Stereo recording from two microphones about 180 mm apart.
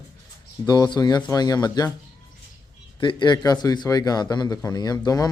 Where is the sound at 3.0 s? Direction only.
25° left (ahead or behind).